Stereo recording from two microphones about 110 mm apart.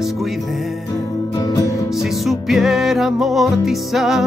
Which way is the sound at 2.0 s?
Centre (ahead or behind).